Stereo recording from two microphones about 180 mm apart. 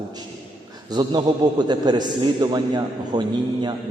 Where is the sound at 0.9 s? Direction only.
25° right (ahead or behind).